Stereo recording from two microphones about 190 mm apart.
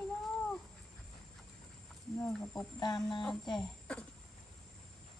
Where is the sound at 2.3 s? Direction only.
5° left (ahead or behind).